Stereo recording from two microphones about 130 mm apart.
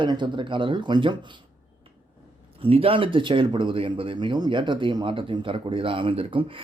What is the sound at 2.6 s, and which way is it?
Speech, 45° right (ahead or behind).